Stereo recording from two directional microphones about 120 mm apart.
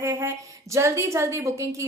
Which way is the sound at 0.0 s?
20° right (ahead or behind).